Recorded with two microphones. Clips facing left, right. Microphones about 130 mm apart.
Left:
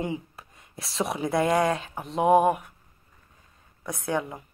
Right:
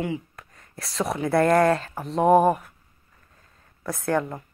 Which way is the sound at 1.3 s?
5° left (ahead or behind).